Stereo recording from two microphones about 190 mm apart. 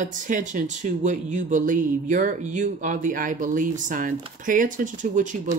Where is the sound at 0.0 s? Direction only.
40° right (ahead or behind).